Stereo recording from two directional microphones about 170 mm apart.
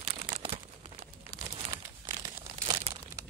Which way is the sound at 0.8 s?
35° right (ahead or behind).